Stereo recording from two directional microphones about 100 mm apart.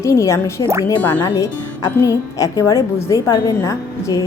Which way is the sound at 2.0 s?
35° left (ahead or behind).